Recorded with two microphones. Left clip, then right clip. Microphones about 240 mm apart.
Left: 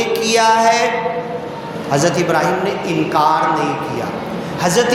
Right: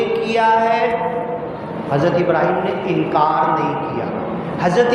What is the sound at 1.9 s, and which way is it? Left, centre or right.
A man's voice, left.